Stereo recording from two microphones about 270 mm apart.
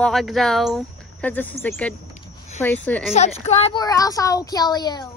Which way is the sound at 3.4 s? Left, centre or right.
Left.